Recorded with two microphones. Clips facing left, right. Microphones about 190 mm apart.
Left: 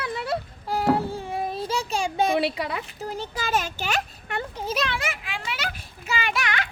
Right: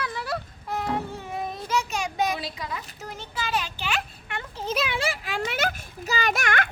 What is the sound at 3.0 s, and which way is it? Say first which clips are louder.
A child's voice: left 3 dB; 35° left (ahead or behind).